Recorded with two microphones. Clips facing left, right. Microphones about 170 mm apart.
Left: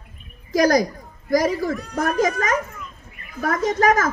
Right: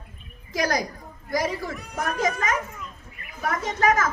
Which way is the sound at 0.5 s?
40° left (ahead or behind).